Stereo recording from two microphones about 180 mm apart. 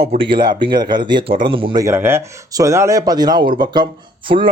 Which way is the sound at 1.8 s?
15° right (ahead or behind).